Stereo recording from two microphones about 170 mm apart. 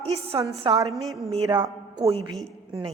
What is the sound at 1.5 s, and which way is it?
Speech, 25° right (ahead or behind).